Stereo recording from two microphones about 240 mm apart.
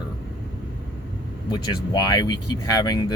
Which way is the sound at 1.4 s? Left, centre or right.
Centre.